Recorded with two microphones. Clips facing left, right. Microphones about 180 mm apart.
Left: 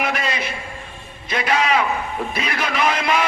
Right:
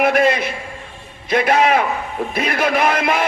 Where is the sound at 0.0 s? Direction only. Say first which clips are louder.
Right 9 dB; 55° right (ahead or behind).